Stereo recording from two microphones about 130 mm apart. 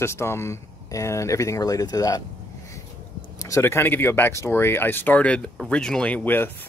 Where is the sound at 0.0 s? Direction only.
20° left (ahead or behind).